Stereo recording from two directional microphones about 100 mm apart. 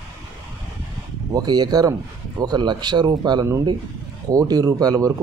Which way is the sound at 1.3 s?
40° right (ahead or behind).